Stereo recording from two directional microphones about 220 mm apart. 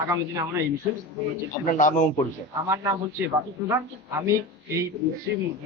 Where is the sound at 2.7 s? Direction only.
15° right (ahead or behind).